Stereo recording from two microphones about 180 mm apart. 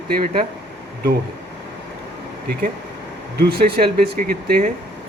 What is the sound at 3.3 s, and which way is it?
Speech, 60° right (ahead or behind).